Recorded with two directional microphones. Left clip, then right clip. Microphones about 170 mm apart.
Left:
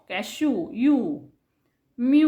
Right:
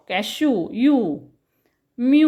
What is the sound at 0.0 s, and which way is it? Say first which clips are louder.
A woman's voice: right 5 dB; 25° right (ahead or behind).